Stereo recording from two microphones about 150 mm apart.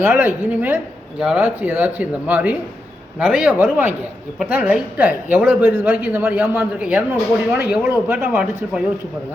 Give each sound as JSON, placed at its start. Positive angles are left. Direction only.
{"t": 0.0, "sound": "a woman's voice", "side_deg": -15}